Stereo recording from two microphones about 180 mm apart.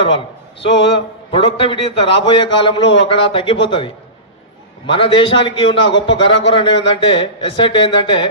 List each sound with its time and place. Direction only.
0.9 s a man's voice: 30° left (ahead or behind)